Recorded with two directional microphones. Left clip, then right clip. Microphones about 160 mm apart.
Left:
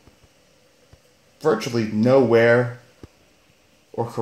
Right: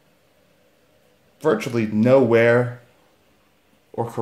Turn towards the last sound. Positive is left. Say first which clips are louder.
# even
turn(degrees=-5)  # may be behind; listen again after turning